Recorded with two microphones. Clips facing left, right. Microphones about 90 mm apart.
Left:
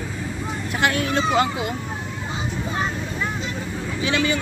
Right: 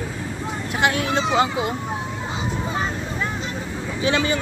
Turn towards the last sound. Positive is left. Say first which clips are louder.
# right 1 dB
turn(degrees=-35)  # may be behind; listen again after turning